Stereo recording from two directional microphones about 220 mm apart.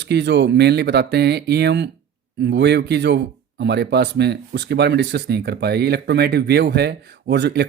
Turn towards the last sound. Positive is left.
turn(degrees=-50)  # may be behind; listen again after turning